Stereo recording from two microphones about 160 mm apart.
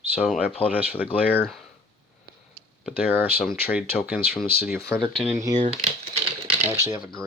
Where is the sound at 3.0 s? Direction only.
10° right (ahead or behind).